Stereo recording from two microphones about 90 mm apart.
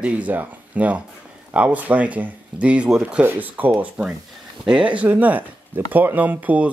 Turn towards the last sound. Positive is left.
turn(degrees=-15)  # may be behind; listen again after turning